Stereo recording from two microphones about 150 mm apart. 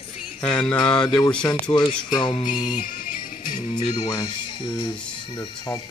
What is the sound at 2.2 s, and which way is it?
Speech, 30° left (ahead or behind).